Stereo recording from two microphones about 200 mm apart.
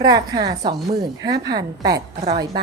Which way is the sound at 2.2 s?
30° right (ahead or behind).